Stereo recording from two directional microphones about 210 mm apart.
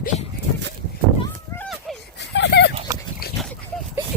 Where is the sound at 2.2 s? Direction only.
55° left (ahead or behind).